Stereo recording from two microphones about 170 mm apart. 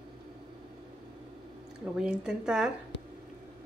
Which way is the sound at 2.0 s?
5° right (ahead or behind).